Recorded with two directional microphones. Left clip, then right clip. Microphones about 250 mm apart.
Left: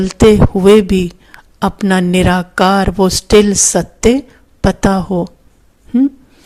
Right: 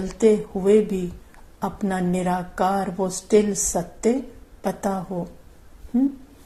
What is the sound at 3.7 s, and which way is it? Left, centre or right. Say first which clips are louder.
A woman's voice: left 11 dB; left.